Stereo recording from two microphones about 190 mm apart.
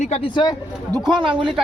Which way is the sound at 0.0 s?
30° left (ahead or behind).